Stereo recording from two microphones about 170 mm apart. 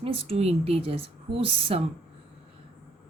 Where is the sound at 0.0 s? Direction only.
35° right (ahead or behind).